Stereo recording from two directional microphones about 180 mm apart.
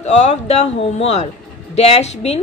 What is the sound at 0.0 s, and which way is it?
Speech, 40° left (ahead or behind).